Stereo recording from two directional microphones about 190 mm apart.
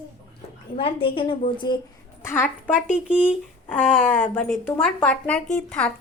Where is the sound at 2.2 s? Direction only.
10° left (ahead or behind).